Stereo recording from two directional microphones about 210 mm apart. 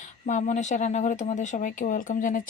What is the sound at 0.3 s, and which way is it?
Speech, 35° left (ahead or behind).